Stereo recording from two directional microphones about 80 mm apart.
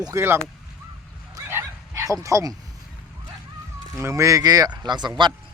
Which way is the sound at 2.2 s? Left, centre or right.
Right.